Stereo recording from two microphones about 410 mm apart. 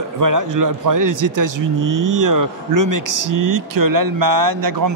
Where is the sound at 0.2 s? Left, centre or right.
Right.